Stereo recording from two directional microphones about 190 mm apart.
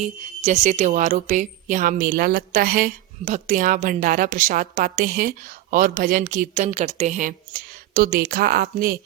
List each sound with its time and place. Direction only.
0.0 s speech: 35° right (ahead or behind)